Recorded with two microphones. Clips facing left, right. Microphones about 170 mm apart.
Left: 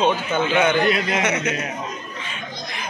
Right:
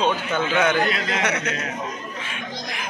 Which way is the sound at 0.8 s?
20° left (ahead or behind).